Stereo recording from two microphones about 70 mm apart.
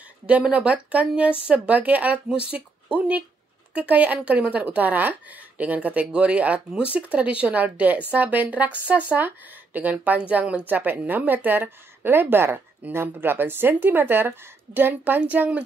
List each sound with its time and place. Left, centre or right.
0.3 s speech: centre